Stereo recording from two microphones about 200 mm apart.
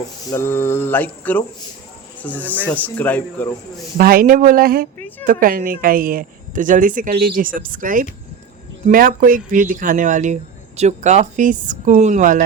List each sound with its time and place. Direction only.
0.3 s mantra: 10° left (ahead or behind)
3.9 s a woman's voice: 45° right (ahead or behind)